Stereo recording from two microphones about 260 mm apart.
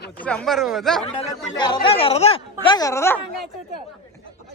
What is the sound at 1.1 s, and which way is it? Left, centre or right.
Speech, centre.